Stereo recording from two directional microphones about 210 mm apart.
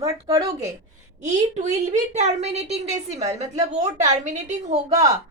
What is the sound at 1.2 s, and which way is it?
A woman's voice, 35° right (ahead or behind).